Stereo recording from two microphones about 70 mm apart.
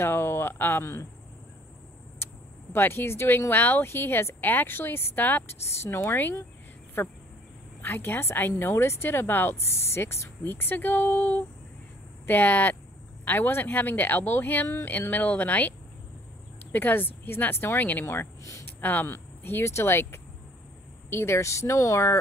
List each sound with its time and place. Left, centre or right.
0.0 s speech: left
2.7 s speech: left
16.7 s speech: left
18.4 s a sound: left
18.7 s speech: left